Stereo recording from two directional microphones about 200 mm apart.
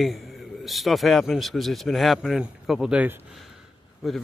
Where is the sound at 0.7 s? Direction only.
Centre (ahead or behind).